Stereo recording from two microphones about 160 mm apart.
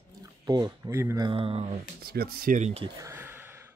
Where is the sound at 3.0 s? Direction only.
15° right (ahead or behind).